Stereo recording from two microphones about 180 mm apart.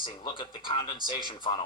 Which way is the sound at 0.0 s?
25° left (ahead or behind).